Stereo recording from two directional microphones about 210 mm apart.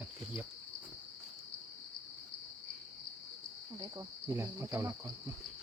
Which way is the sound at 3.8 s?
15° right (ahead or behind).